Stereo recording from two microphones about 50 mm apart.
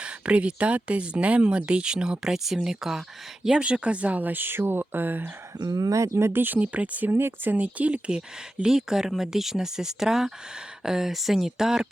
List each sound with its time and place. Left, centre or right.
0.0 s speech: right; by 3.0 s centre
3.6 s speech: right
5.9 s speech: right
6.3 s speech: right
6.6 s speech: right
7.1 s speech: right
7.5 s speech: right; by 11.9 s centre